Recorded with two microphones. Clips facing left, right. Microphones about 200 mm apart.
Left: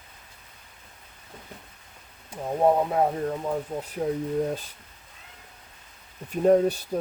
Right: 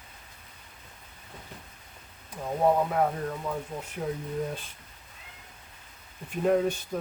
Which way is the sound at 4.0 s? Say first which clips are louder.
Left 5 dB; 35° left (ahead or behind).